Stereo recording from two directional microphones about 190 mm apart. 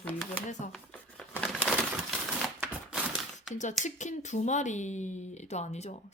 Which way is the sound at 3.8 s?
40° left (ahead or behind).